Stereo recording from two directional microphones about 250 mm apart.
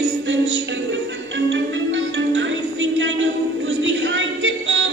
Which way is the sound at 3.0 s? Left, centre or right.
Right.